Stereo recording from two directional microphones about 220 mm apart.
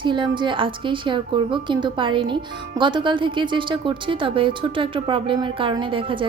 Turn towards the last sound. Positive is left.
turn(degrees=-20)  # may be behind; listen again after turning